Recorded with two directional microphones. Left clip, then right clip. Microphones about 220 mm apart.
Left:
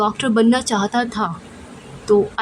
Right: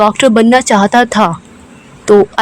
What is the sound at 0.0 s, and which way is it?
Speech, 25° right (ahead or behind).